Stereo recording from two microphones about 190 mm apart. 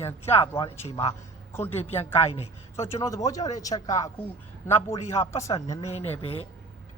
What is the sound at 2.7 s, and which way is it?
A man's voice, 15° left (ahead or behind).